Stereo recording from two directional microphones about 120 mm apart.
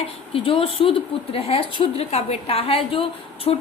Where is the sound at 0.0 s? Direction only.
50° left (ahead or behind).